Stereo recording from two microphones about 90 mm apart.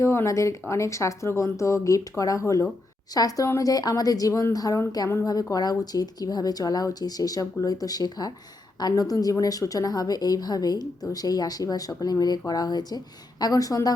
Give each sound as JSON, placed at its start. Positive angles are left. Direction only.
{"t": 0.0, "sound": "speech", "side_deg": 30}